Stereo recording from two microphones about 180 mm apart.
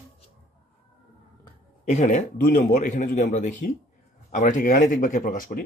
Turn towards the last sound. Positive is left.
turn(degrees=50)  # may be behind; listen again after turning